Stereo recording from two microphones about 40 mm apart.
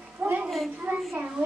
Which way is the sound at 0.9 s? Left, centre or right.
Right.